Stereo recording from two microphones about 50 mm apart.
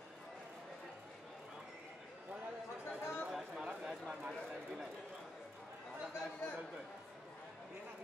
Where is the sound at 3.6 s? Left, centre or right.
Centre.